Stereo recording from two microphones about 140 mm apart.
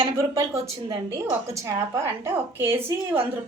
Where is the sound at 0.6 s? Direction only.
20° right (ahead or behind).